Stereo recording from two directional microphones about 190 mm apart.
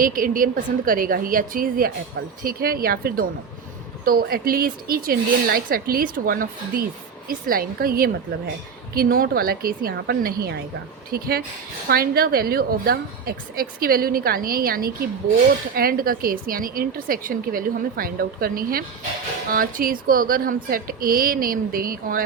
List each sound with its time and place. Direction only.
0.0 s a woman's voice: 45° right (ahead or behind)